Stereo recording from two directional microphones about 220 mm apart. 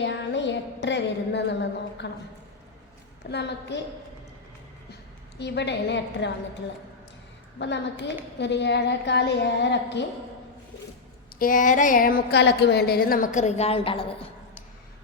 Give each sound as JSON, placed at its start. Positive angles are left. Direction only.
{"t": 0.0, "sound": "a sound", "side_deg": 55}
{"t": 2.0, "sound": "a woman's voice", "side_deg": 50}
{"t": 3.2, "sound": "a woman's voice", "side_deg": 50}
{"t": 5.4, "sound": "a woman's voice", "side_deg": 50}
{"t": 7.6, "sound": "a woman's voice", "side_deg": 50}
{"t": 11.3, "sound": "speech", "side_deg": 35}